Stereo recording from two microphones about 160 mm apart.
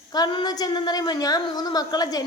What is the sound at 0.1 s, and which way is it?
A woman's voice, 30° left (ahead or behind).